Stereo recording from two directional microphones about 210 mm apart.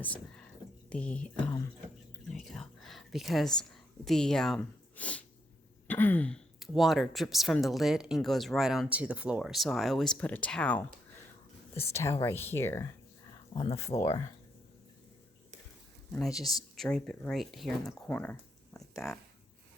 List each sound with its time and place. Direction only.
0.9 s a woman's voice: 5° left (ahead or behind)
13.5 s speech: 30° left (ahead or behind)
13.7 s speech: 15° left (ahead or behind)
16.1 s speech: centre (ahead or behind)